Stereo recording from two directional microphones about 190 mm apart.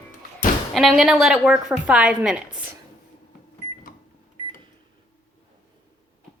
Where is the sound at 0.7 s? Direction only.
Centre (ahead or behind).